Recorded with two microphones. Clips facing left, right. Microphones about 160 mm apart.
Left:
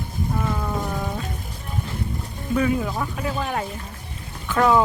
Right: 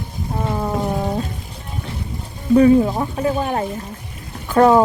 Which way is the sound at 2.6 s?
35° right (ahead or behind).